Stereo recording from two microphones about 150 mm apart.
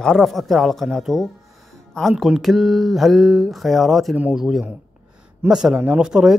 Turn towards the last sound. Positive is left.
turn(degrees=-5)  # may be behind; listen again after turning